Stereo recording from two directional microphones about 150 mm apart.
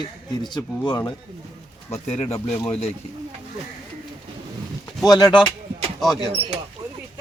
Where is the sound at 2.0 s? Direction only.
45° left (ahead or behind).